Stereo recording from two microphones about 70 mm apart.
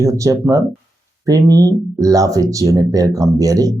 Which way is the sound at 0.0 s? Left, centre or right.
Right.